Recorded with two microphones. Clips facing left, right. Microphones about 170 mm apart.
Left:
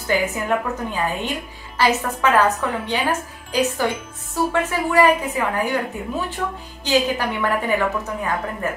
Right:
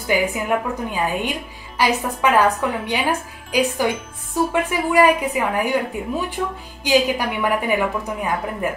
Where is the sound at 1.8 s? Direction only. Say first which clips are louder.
Even; 10° right (ahead or behind).